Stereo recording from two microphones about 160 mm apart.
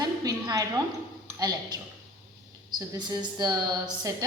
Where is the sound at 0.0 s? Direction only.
25° right (ahead or behind).